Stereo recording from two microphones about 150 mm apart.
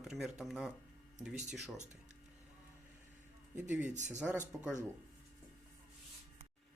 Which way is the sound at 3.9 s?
55° right (ahead or behind).